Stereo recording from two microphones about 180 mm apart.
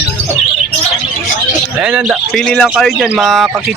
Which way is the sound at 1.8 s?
5° right (ahead or behind).